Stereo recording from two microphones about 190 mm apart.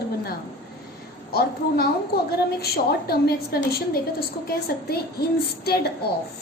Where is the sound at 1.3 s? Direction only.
55° left (ahead or behind).